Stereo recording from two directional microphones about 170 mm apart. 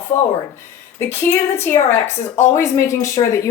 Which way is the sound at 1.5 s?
15° left (ahead or behind).